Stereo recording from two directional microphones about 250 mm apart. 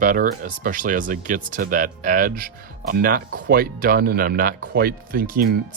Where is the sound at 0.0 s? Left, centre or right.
Right.